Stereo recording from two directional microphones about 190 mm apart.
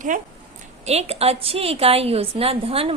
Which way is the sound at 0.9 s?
35° right (ahead or behind).